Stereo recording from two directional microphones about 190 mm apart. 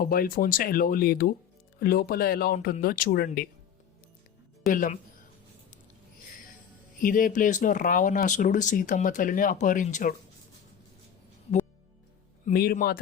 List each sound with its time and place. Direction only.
0.0 s speech: 50° left (ahead or behind)
4.7 s speech: 45° left (ahead or behind)
7.0 s speech: 45° left (ahead or behind)
12.5 s a man's voice: 55° left (ahead or behind)